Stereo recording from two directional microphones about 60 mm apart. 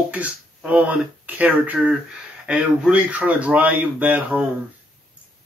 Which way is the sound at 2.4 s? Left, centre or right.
Centre.